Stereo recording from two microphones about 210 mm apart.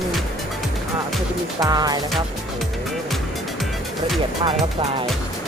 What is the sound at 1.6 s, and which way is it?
Music, 20° right (ahead or behind).